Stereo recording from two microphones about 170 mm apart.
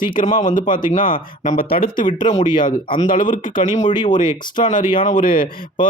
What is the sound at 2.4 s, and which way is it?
Speech, 30° left (ahead or behind).